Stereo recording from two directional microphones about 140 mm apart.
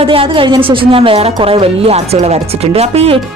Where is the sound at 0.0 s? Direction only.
40° right (ahead or behind).